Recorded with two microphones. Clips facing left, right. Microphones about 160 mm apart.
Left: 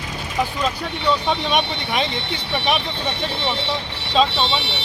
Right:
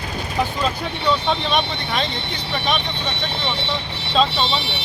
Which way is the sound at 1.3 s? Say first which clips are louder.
Even; 10° left (ahead or behind).